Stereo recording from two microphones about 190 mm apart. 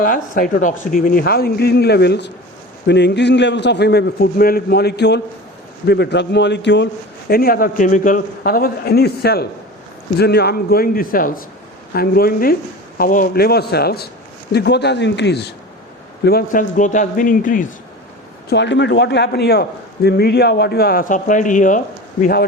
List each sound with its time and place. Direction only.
0.0 s a man's voice: 45° left (ahead or behind); by 6.8 s 65° left (ahead or behind)
7.3 s a man's voice: 50° left (ahead or behind)
16.2 s a man's voice: 50° left (ahead or behind)
18.4 s a man's voice: 65° left (ahead or behind); by 21.8 s 40° left (ahead or behind)
22.2 s a man's voice: 55° left (ahead or behind)